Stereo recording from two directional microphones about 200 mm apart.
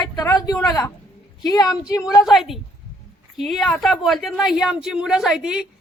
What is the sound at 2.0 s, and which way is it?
A woman's voice, centre (ahead or behind).